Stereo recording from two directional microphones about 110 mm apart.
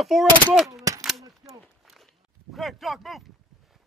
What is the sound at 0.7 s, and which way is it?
Speech, 30° right (ahead or behind).